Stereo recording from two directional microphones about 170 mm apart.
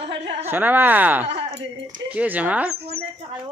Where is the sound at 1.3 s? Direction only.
35° right (ahead or behind).